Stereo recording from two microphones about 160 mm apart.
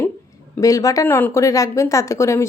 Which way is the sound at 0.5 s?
20° left (ahead or behind).